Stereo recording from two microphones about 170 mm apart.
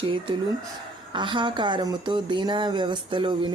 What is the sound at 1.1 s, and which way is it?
Speech, 30° right (ahead or behind).